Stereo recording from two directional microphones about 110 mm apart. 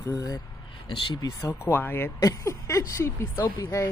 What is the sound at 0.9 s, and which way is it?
Speech, 50° left (ahead or behind).